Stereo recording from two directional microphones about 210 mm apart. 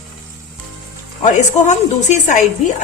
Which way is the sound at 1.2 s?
35° left (ahead or behind).